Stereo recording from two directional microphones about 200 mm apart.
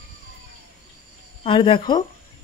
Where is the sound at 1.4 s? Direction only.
25° left (ahead or behind).